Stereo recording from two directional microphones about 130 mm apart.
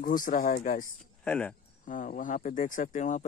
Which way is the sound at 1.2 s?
10° left (ahead or behind).